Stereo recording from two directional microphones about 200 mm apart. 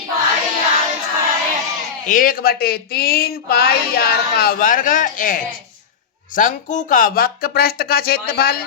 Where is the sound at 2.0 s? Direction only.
45° left (ahead or behind).